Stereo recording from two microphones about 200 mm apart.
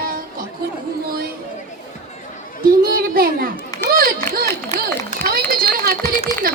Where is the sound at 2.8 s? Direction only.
45° right (ahead or behind).